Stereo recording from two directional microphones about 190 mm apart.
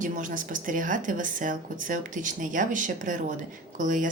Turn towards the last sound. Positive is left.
turn(degrees=-45)  # may be behind; listen again after turning